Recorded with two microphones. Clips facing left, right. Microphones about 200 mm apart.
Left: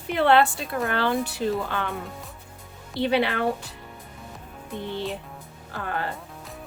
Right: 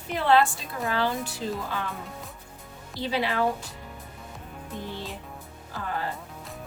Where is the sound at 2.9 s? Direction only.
65° left (ahead or behind).